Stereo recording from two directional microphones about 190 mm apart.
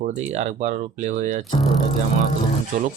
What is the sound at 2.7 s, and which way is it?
Speech, 35° right (ahead or behind).